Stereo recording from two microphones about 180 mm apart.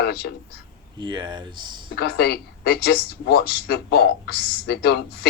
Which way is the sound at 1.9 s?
60° left (ahead or behind).